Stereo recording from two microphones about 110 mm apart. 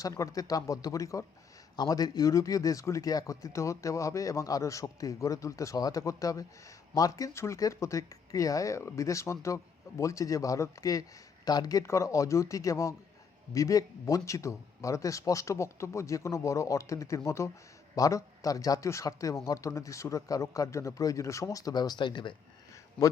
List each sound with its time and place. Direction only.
0.0 s speech: 30° left (ahead or behind); by 22.4 s 45° left (ahead or behind)
23.0 s a man's voice: 5° left (ahead or behind)